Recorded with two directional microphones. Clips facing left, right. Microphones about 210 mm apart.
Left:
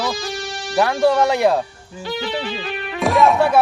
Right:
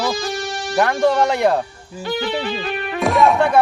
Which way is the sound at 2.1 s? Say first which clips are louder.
Right 2 dB; 50° right (ahead or behind).